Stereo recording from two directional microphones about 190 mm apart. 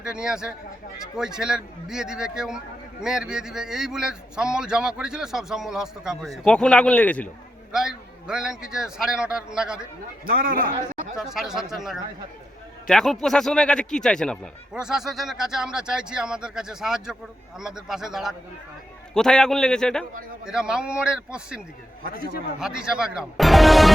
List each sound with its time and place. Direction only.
0.0 s a man's voice: 5° right (ahead or behind)
7.7 s a man's voice: 5° right (ahead or behind)
10.2 s a man's voice: 50° right (ahead or behind)
11.2 s a man's voice: centre (ahead or behind)
22.5 s a man's voice: 5° right (ahead or behind)